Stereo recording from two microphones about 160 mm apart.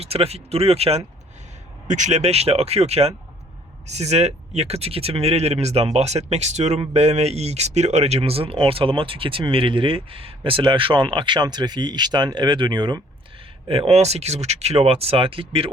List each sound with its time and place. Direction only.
0.0 s speech: 40° right (ahead or behind)